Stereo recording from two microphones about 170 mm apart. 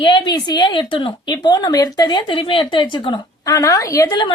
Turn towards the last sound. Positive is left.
turn(degrees=25)  # may be behind; listen again after turning